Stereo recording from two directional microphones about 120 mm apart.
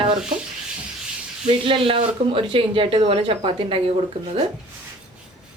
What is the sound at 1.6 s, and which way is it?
Speech, 45° right (ahead or behind).